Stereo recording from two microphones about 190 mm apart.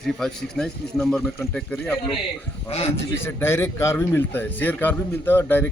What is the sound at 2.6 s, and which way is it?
Speech, 35° left (ahead or behind).